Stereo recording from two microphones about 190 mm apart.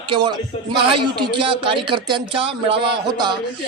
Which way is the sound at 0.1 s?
25° right (ahead or behind).